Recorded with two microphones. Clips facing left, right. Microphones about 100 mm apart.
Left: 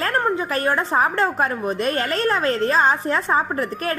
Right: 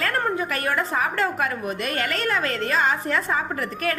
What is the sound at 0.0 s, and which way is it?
A woman's voice, 30° left (ahead or behind).